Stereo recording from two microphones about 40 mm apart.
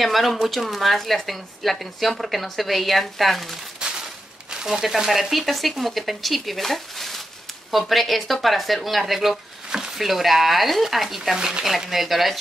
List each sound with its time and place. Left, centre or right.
0.0 s speech: centre
3.8 s a sound: right
4.6 s speech: centre
11.3 s speech: centre
11.9 s speech: centre